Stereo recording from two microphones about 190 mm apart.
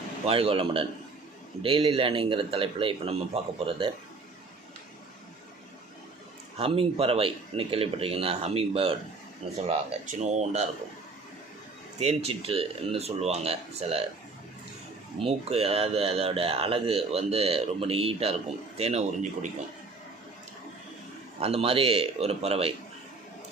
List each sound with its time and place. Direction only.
0.3 s a man's voice: 30° right (ahead or behind)
6.6 s speech: 30° right (ahead or behind)
11.9 s speech: 35° right (ahead or behind)
15.2 s speech: 30° right (ahead or behind)
21.3 s speech: 30° right (ahead or behind)